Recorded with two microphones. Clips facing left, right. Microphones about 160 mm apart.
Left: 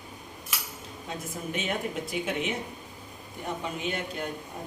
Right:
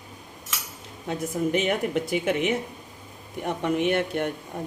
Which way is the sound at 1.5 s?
70° right (ahead or behind).